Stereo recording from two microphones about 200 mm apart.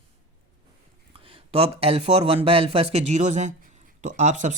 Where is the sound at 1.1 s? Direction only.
25° right (ahead or behind).